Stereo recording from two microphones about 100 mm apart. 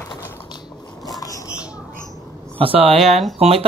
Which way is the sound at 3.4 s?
75° right (ahead or behind).